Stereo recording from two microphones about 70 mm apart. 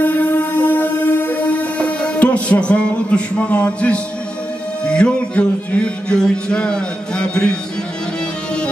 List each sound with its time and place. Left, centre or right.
0.0 s music: left